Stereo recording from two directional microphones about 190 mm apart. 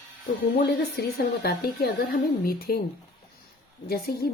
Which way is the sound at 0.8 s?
60° left (ahead or behind).